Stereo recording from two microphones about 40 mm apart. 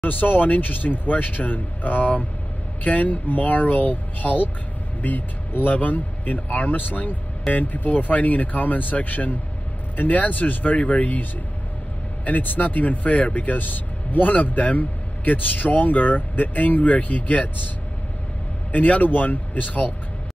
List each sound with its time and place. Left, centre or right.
0.0 s speech: left
12.3 s speech: left
18.7 s speech: left